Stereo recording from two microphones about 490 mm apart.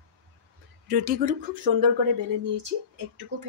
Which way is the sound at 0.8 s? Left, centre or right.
Centre.